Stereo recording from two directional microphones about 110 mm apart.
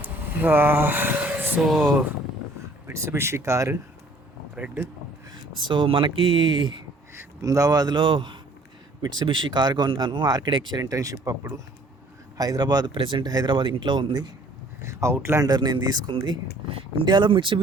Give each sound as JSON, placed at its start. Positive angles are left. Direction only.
{"t": 0.0, "sound": "a sound", "side_deg": -20}
{"t": 1.6, "sound": "speech", "side_deg": 0}
{"t": 2.8, "sound": "speech", "side_deg": -25}
{"t": 4.5, "sound": "speech", "side_deg": -15}
{"t": 5.6, "sound": "speech", "side_deg": -50}
{"t": 7.1, "sound": "speech", "side_deg": -25}
{"t": 14.8, "sound": "speech", "side_deg": -25}
{"t": 15.4, "sound": "speech", "side_deg": -40}
{"t": 17.1, "sound": "speech", "side_deg": -45}